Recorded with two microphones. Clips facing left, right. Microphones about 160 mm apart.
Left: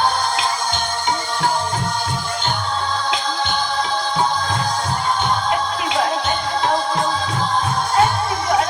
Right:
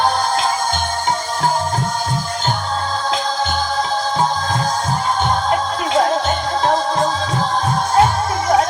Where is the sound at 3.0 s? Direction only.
45° right (ahead or behind).